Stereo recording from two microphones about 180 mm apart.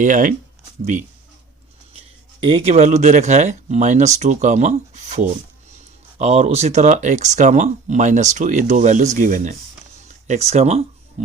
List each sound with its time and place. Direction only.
0.0 s speech: 45° right (ahead or behind)
2.0 s speech: 30° right (ahead or behind)